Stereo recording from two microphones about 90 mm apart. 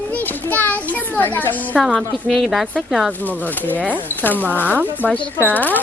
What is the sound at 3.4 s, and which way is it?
A child's voice, 20° left (ahead or behind).